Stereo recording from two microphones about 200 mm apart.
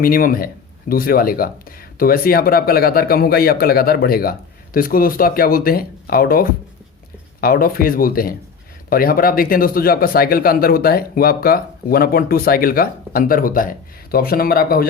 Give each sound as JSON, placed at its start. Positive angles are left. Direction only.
{"t": 0.0, "sound": "speech", "side_deg": 45}